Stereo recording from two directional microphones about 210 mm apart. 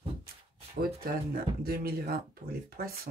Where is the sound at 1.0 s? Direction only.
45° right (ahead or behind).